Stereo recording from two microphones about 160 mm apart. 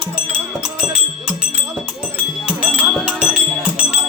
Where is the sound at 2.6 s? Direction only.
5° right (ahead or behind).